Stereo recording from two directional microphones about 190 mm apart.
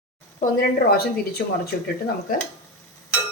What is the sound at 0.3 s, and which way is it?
A woman's voice, 50° left (ahead or behind).